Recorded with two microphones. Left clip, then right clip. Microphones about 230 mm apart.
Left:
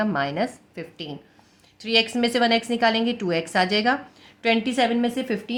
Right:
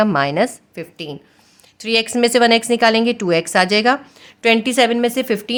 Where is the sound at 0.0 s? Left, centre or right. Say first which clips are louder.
Right 8 dB; right.